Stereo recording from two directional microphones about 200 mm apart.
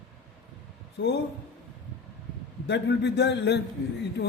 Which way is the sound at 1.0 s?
60° left (ahead or behind).